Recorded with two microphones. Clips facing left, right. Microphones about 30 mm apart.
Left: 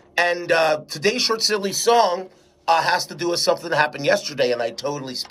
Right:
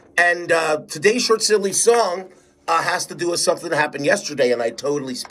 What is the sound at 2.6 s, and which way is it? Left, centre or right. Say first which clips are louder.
Speech: left 1 dB; left.